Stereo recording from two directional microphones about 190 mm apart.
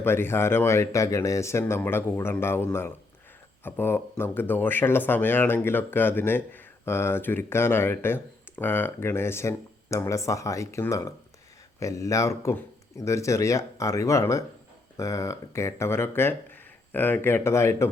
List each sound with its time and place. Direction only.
0.0 s speech: 10° left (ahead or behind)